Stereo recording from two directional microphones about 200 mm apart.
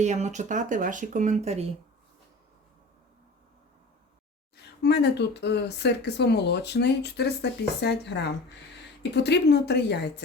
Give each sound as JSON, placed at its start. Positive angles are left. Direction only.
{"t": 0.0, "sound": "speech", "side_deg": -35}
{"t": 4.5, "sound": "speech", "side_deg": 55}